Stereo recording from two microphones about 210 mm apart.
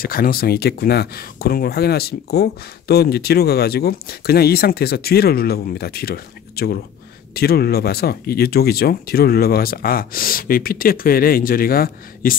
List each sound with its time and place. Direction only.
0.0 s speech: 45° left (ahead or behind)